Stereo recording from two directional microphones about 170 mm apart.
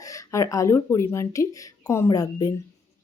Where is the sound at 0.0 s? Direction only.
20° left (ahead or behind).